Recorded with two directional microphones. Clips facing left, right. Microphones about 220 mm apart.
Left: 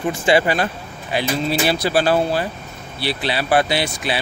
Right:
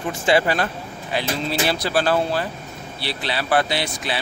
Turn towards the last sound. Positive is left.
turn(degrees=10)  # may be behind; listen again after turning